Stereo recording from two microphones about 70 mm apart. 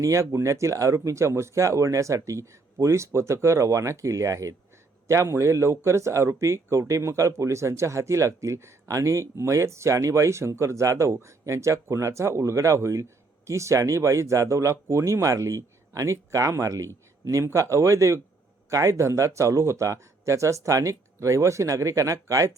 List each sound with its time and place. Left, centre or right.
0.0 s speech: right